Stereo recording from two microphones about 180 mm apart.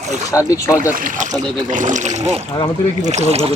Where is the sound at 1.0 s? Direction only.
50° right (ahead or behind).